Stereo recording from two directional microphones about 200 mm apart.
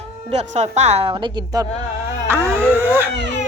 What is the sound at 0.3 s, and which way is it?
A woman's voice, 35° right (ahead or behind).